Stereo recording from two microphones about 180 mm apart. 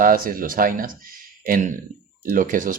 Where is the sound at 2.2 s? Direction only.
50° right (ahead or behind).